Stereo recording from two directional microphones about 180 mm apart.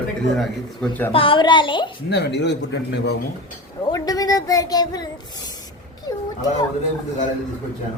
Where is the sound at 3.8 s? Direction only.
20° left (ahead or behind).